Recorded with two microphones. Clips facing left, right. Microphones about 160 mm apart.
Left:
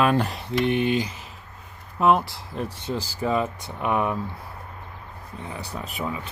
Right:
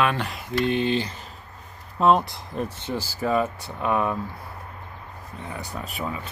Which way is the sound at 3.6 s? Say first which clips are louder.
Even; 20° left (ahead or behind).